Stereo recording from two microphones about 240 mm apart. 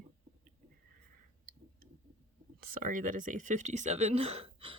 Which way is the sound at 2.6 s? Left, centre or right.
Right.